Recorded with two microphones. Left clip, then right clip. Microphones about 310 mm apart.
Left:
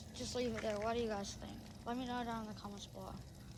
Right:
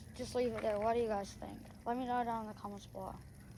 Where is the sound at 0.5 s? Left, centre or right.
Right.